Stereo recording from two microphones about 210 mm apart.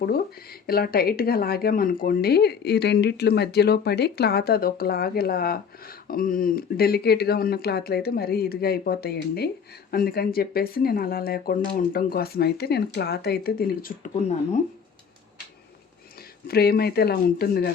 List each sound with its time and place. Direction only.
0.7 s speech: 45° left (ahead or behind)
16.5 s speech: 45° left (ahead or behind)